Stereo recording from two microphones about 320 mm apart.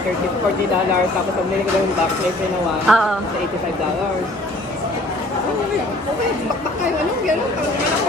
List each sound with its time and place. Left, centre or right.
2.9 s speech: centre